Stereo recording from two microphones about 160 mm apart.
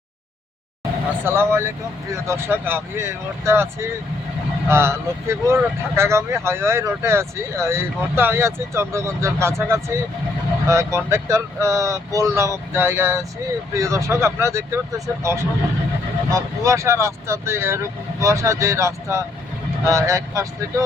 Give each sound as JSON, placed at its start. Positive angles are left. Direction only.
{"t": 1.2, "sound": "speech", "side_deg": -15}